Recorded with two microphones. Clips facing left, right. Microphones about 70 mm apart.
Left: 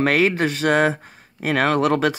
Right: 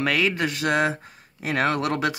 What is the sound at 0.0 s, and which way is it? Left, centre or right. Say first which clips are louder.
Speech: left 5 dB; left.